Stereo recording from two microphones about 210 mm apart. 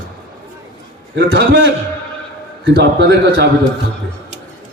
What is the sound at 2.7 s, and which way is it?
Speech, 55° right (ahead or behind).